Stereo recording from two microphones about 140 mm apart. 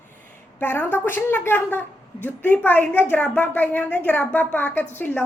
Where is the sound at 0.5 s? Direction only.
15° left (ahead or behind).